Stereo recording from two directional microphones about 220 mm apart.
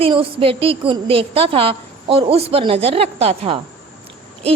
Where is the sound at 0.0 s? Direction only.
25° right (ahead or behind).